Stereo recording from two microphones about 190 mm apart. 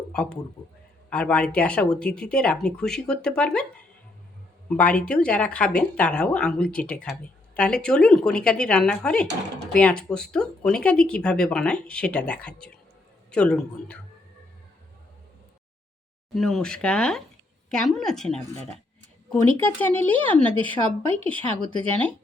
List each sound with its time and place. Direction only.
0.1 s speech: 5° left (ahead or behind)
4.7 s speech: 5° left (ahead or behind)
16.3 s a woman's voice: centre (ahead or behind)
21.3 s speech: 25° right (ahead or behind)